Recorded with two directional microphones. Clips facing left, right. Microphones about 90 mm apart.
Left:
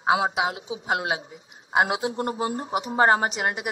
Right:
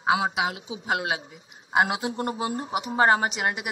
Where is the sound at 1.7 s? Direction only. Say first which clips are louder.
Left 1 dB; 25° left (ahead or behind).